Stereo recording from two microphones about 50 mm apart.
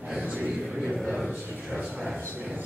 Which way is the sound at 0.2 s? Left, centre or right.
Right.